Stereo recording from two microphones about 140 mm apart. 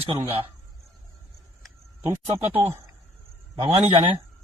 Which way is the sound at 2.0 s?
15° right (ahead or behind).